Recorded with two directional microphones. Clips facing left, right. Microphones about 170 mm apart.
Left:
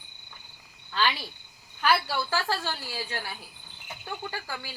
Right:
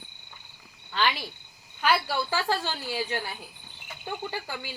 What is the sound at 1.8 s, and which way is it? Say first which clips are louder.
A woman's voice: even; 20° right (ahead or behind).